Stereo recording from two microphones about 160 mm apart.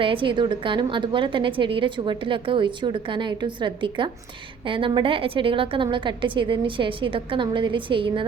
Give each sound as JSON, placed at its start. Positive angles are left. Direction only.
{"t": 0.0, "sound": "a woman's voice", "side_deg": -30}